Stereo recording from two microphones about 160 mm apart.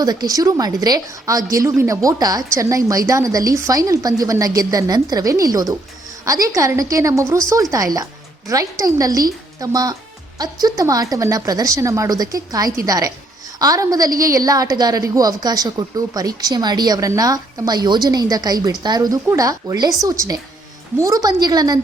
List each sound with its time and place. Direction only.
0.0 s a woman's voice: 25° right (ahead or behind)